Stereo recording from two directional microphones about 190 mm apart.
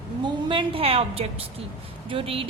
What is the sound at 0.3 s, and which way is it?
A woman's voice, 25° right (ahead or behind).